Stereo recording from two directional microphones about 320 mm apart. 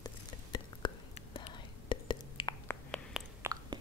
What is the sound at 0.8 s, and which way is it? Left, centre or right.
Whispering, centre.